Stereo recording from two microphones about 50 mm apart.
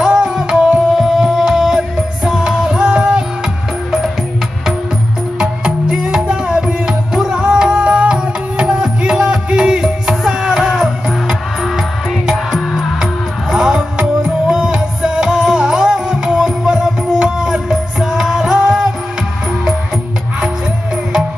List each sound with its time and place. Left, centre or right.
0.0 s music: centre
0.9 s music: centre
5.4 s music: centre
13.6 s music: centre